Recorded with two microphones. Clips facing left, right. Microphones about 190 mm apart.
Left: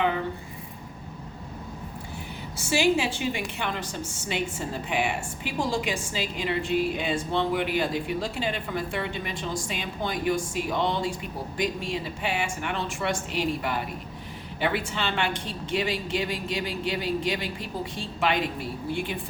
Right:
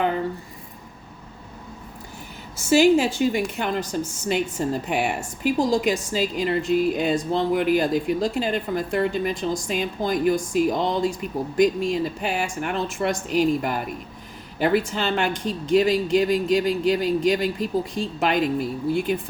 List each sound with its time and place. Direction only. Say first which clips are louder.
2.6 s a woman's voice: right 7 dB; 45° right (ahead or behind)